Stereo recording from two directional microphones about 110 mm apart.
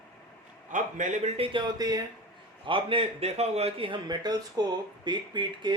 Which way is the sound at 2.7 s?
50° right (ahead or behind).